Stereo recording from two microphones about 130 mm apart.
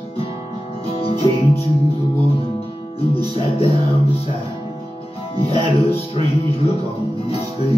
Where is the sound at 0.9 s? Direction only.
50° left (ahead or behind).